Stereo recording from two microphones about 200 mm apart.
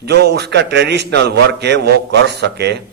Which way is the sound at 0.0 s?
55° right (ahead or behind).